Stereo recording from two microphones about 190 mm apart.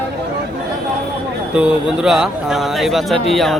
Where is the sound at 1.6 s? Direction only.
5° right (ahead or behind).